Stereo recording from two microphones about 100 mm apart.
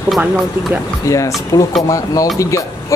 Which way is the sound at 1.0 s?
30° left (ahead or behind).